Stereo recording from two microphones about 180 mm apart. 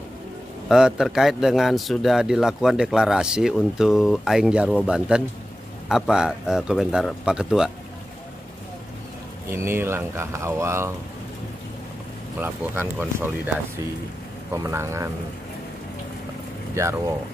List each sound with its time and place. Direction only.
0.7 s a man's voice: 5° right (ahead or behind)
9.5 s speech: 15° right (ahead or behind)
12.4 s speech: 10° right (ahead or behind)
14.5 s speech: 15° right (ahead or behind)
16.7 s speech: 15° right (ahead or behind)